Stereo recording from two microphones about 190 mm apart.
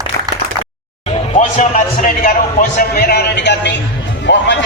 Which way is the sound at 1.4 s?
45° left (ahead or behind).